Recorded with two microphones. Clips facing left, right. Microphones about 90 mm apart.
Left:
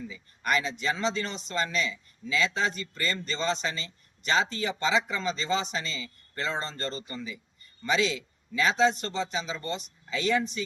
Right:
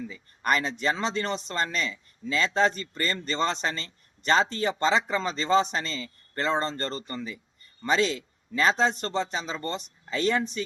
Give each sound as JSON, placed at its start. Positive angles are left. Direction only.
{"t": 0.4, "sound": "speech", "side_deg": -50}